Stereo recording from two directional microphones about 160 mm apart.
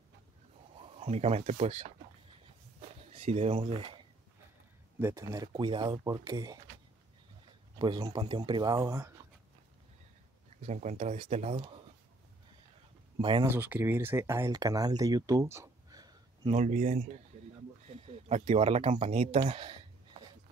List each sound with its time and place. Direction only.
0.8 s speech: 40° right (ahead or behind)
3.0 s speech: 40° right (ahead or behind)
4.9 s speech: 15° right (ahead or behind)
7.8 s speech: 25° right (ahead or behind)
8.7 s speech: 15° right (ahead or behind)
10.6 s speech: 45° right (ahead or behind)
13.2 s speech: 30° right (ahead or behind)
13.5 s speech: 10° right (ahead or behind)
16.5 s speech: 45° right (ahead or behind)